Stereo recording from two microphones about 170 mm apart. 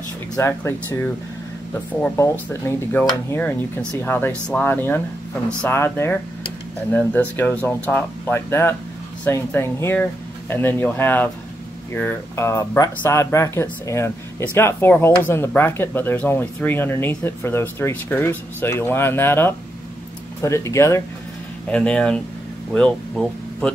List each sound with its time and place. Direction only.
0.4 s speech: 15° left (ahead or behind)